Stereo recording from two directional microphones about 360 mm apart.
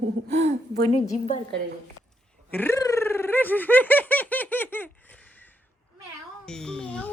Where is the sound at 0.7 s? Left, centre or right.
Centre.